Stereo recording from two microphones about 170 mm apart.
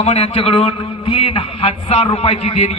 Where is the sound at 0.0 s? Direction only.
40° left (ahead or behind).